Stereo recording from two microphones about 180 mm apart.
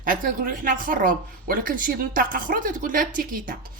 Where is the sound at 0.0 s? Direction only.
50° right (ahead or behind).